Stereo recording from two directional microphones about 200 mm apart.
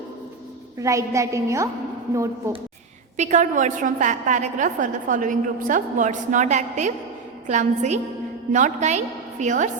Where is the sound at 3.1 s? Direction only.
35° right (ahead or behind).